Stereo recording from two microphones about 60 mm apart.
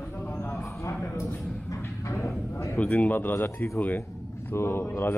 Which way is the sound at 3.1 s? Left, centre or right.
Left.